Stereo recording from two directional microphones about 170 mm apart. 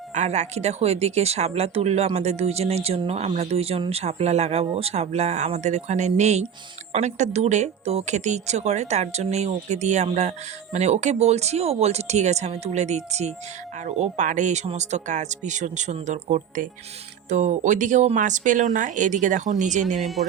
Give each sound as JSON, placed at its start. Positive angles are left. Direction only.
{"t": 0.1, "sound": "speech", "side_deg": -45}
{"t": 20.0, "sound": "speech", "side_deg": 0}